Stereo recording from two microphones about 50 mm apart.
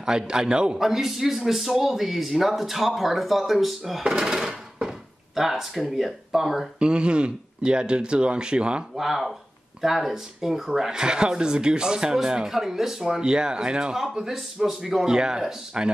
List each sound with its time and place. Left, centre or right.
0.0 s speech: centre
0.7 s a man's voice: centre
4.0 s a sound: centre
5.9 s a man's voice: centre
6.8 s a man's voice: centre
8.9 s a man's voice: centre